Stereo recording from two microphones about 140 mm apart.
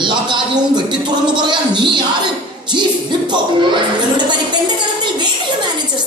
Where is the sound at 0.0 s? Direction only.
35° right (ahead or behind).